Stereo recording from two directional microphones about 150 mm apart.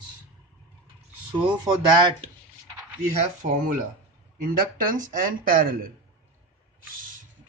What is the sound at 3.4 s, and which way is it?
A man's voice, 65° right (ahead or behind).